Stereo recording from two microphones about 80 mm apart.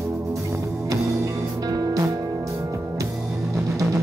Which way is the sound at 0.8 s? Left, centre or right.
Right.